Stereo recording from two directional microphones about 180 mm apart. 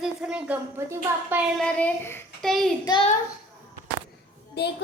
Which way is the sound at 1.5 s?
5° left (ahead or behind).